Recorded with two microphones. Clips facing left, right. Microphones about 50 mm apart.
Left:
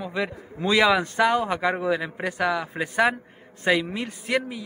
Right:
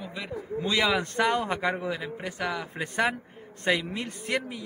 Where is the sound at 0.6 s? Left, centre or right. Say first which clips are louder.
Left 6 dB; left.